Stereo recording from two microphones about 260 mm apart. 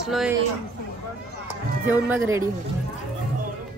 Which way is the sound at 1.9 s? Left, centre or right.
Centre.